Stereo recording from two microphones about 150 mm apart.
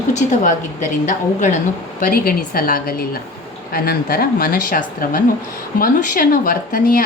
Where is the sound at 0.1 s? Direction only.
55° left (ahead or behind).